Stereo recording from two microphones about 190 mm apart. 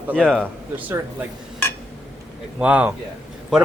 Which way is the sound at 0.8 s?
10° right (ahead or behind).